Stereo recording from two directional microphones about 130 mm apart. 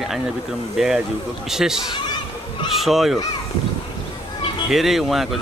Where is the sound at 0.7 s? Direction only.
5° right (ahead or behind).